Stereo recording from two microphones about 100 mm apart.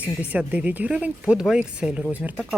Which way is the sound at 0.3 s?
15° right (ahead or behind).